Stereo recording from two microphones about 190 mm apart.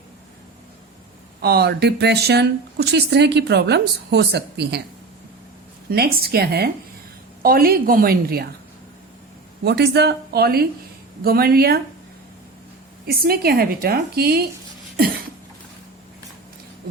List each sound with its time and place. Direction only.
1.4 s speech: 55° right (ahead or behind)
5.9 s a woman's voice: 55° right (ahead or behind)
9.6 s speech: 60° right (ahead or behind)
13.1 s a woman's voice: 50° right (ahead or behind)